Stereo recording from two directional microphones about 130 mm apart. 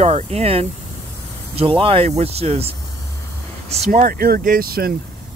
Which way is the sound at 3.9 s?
90° right.